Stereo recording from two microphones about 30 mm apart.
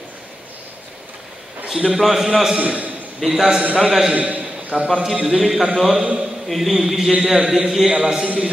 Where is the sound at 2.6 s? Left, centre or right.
Right.